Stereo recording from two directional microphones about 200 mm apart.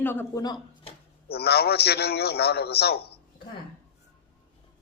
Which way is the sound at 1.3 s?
50° left (ahead or behind).